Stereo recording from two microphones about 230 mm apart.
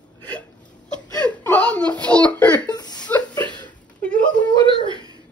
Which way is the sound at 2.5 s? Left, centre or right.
Centre.